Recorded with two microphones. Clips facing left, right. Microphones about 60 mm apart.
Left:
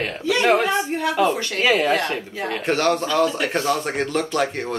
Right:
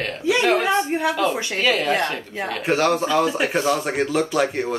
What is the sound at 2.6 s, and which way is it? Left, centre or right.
Speech, centre.